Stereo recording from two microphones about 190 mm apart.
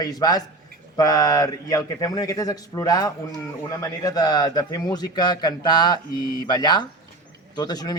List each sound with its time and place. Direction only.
0.0 s a man's voice: 20° left (ahead or behind)